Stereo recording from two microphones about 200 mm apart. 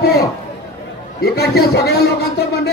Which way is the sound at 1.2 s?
50° left (ahead or behind).